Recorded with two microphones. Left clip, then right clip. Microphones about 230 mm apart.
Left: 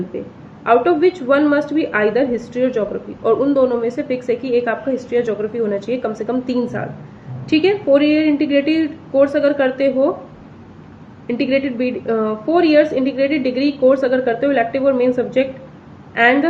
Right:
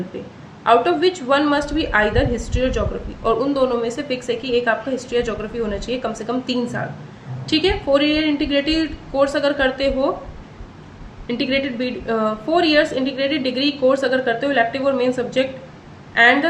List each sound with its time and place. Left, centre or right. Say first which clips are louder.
0.6 s a woman's voice: left 2 dB; centre
11.3 s a woman's voice: left 3 dB; centre